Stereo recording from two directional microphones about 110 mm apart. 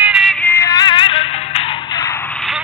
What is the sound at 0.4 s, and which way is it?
Music, 20° left (ahead or behind).